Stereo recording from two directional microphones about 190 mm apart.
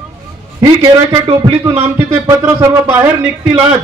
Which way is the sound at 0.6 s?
25° right (ahead or behind).